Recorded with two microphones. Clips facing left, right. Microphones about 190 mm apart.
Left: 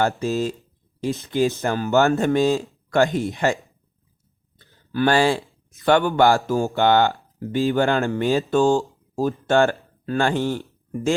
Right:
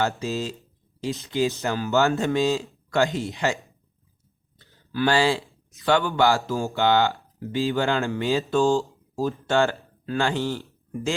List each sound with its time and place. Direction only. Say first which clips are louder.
0.2 s speech: left 5 dB; 55° left (ahead or behind)
8.7 s a sound: left 2 dB; 15° left (ahead or behind)
9.2 s speech: left 4 dB; 55° left (ahead or behind)